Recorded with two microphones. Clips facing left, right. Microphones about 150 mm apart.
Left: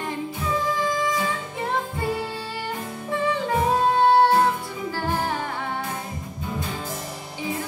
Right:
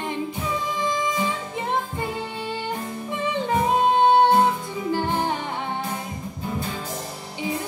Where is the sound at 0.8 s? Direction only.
20° right (ahead or behind).